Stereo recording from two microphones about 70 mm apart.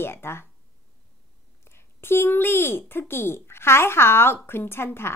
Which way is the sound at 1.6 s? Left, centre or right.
Left.